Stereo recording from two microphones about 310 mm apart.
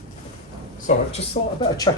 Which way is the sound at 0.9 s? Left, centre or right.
Left.